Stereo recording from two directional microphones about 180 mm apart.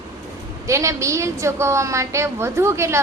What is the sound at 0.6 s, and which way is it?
A woman's voice, 15° right (ahead or behind).